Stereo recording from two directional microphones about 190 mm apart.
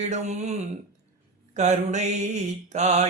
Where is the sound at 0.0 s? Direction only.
35° right (ahead or behind).